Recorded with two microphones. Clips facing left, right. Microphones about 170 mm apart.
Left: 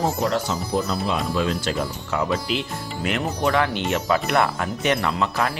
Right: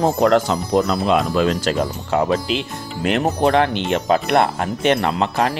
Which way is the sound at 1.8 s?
45° right (ahead or behind).